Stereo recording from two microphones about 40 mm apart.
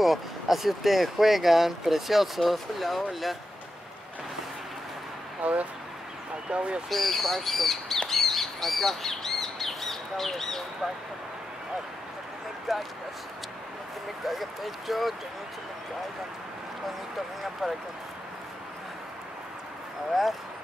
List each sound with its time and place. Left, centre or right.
0.0 s speech: centre
5.4 s speech: right
6.9 s speech: centre
8.1 s bird: centre
12.7 s speech: centre
14.2 s speech: centre